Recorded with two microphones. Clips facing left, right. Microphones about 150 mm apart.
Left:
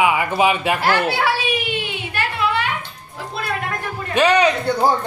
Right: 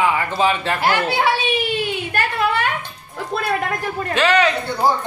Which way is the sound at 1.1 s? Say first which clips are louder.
Right 1 dB; 20° right (ahead or behind).